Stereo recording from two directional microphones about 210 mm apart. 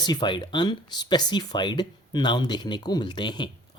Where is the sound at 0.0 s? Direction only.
20° left (ahead or behind).